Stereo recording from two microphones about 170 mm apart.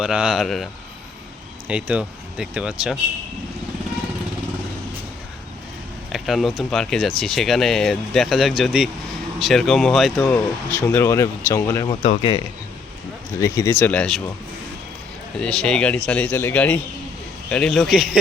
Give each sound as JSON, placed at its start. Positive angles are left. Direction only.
{"t": 0.0, "sound": "speech", "side_deg": -5}
{"t": 6.1, "sound": "speech", "side_deg": 0}
{"t": 10.2, "sound": "speech", "side_deg": 15}
{"t": 13.4, "sound": "speech", "side_deg": 15}
{"t": 15.4, "sound": "speech", "side_deg": 5}